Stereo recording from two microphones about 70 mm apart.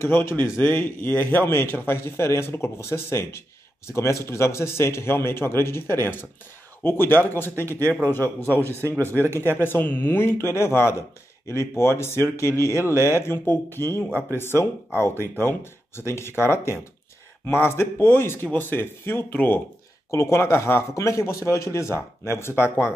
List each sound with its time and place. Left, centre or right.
0.0 s a man's voice: left
7.9 s a man's voice: centre
8.6 s a man's voice: right
9.4 s a man's voice: left
16.1 s a man's voice: left